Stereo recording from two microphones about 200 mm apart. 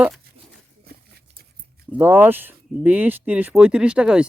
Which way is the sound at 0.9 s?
50° right (ahead or behind).